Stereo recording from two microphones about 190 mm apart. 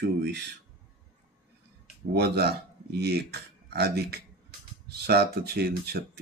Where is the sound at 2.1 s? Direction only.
55° right (ahead or behind).